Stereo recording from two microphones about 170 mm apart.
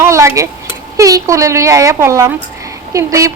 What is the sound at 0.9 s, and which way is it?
A woman's voice, 20° right (ahead or behind).